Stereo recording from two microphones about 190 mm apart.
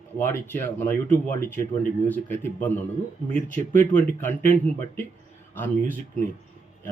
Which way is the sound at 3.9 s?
10° left (ahead or behind).